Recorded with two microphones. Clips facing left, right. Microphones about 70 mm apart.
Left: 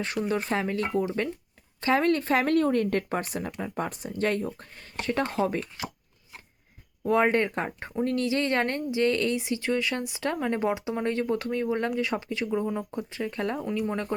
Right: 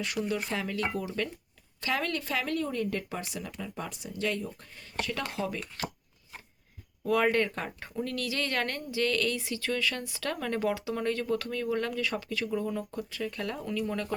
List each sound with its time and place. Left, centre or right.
0.0 s speech: left
7.0 s speech: left